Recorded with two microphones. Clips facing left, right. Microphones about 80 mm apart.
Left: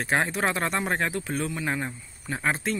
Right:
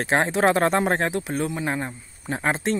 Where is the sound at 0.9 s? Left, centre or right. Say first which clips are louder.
Right 4 dB; right.